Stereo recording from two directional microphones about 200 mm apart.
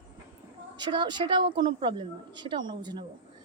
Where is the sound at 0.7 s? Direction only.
20° right (ahead or behind).